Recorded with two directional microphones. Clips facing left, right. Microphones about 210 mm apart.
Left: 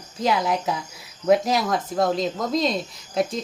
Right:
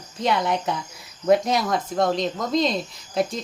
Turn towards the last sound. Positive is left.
turn(degrees=0)  # may be behind; listen again after turning